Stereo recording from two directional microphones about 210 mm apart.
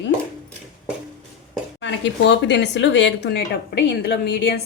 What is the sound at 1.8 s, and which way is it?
Speech, 55° left (ahead or behind).